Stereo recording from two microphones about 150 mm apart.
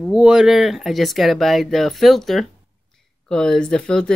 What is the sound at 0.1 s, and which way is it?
Speech, 5° right (ahead or behind).